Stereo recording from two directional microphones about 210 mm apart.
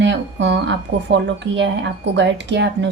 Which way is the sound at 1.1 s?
55° right (ahead or behind).